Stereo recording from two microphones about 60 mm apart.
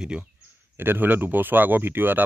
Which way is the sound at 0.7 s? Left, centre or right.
Right.